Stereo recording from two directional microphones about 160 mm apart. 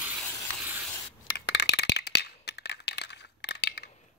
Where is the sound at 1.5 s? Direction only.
90° left.